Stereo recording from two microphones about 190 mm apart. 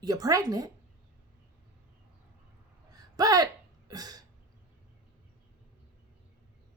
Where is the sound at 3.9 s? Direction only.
20° right (ahead or behind).